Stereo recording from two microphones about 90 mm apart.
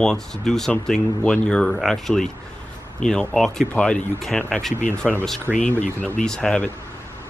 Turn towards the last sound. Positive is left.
turn(degrees=10)  # may be behind; listen again after turning